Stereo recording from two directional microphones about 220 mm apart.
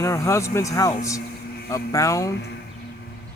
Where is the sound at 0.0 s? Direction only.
15° left (ahead or behind).